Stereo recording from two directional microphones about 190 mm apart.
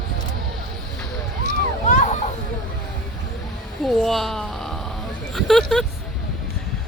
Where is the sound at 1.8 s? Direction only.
40° left (ahead or behind).